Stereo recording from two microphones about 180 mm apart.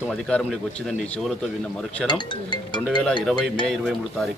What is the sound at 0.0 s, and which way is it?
Speech, 5° left (ahead or behind).